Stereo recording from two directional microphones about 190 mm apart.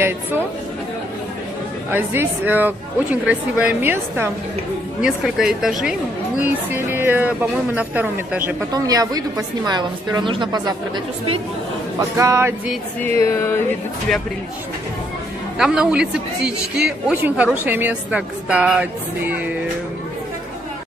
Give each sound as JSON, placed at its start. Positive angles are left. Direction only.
{"t": 1.9, "sound": "a woman's voice", "side_deg": -10}
{"t": 8.7, "sound": "a woman's voice", "side_deg": -20}
{"t": 12.0, "sound": "a woman's voice", "side_deg": -15}
{"t": 13.2, "sound": "music", "side_deg": 15}
{"t": 15.5, "sound": "a woman's voice", "side_deg": -5}